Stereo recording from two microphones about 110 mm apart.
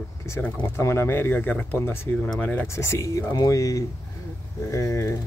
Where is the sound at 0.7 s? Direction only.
25° left (ahead or behind).